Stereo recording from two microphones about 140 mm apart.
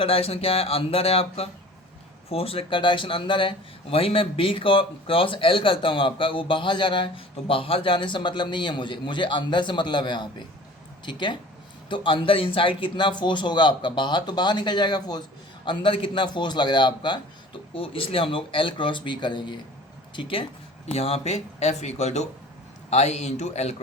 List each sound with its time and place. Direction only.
0.0 s speech: 45° left (ahead or behind)